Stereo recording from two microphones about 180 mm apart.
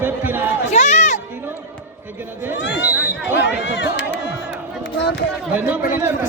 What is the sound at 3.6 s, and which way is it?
Crowd, 85° left.